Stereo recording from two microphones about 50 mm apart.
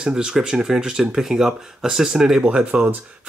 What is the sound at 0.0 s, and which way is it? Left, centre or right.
Speech, centre.